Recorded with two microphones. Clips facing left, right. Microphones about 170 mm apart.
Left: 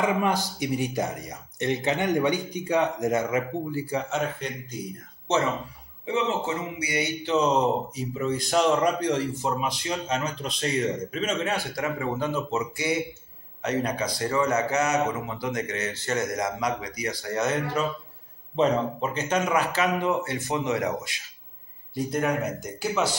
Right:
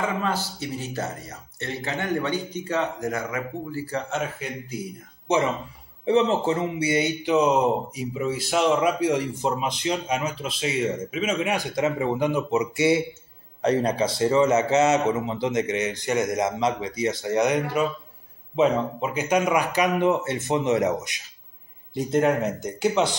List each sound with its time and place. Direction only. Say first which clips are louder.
0.0 s speech: left 2 dB; 15° left (ahead or behind)
4.1 s a man's voice: even; 5° right (ahead or behind)
6.0 s a man's voice: right 6 dB; 35° right (ahead or behind); by 23.1 s 20° right (ahead or behind)